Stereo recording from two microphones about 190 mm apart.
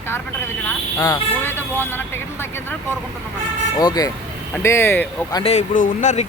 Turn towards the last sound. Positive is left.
turn(degrees=40)  # may be behind; listen again after turning